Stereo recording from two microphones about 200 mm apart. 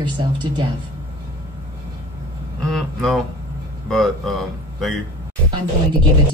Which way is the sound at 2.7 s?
Centre (ahead or behind).